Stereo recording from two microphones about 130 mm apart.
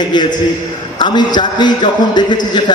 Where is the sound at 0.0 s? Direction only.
35° left (ahead or behind).